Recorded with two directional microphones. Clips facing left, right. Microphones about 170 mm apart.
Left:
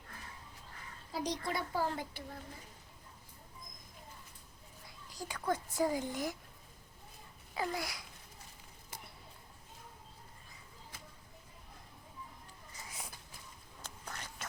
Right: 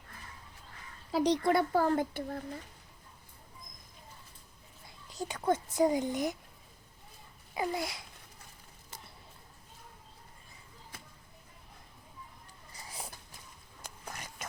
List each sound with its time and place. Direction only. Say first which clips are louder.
1.1 s speech: right 10 dB; 65° right (ahead or behind)
4.9 s speech: right 6 dB; 25° right (ahead or behind)
7.5 s babbling: right 4 dB; 20° right (ahead or behind)
13.8 s a sound: right 2 dB; 10° right (ahead or behind)